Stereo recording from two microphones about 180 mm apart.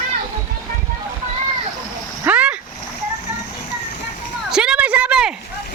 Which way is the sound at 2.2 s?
10° right (ahead or behind).